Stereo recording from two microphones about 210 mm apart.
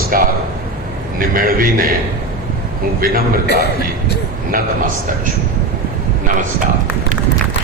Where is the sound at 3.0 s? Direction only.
45° right (ahead or behind).